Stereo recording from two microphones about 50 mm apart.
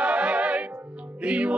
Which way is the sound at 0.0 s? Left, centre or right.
Right.